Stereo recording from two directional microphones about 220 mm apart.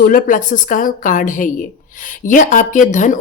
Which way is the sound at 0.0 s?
40° left (ahead or behind).